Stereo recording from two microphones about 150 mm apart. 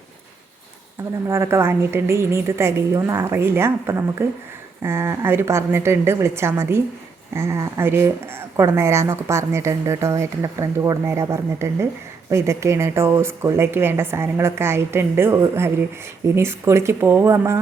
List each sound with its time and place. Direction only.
1.3 s a woman's voice: 20° right (ahead or behind)